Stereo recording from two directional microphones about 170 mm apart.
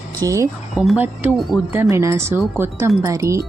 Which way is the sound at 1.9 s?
15° right (ahead or behind).